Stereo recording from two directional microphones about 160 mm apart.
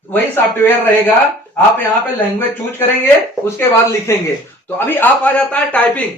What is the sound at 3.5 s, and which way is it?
A man's voice, 15° left (ahead or behind).